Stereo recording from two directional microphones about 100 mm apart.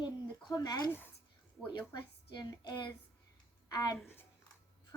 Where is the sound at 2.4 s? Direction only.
45° left (ahead or behind).